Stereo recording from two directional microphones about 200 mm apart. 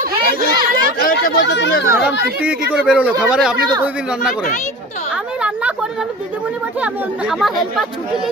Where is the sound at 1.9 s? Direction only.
5° right (ahead or behind).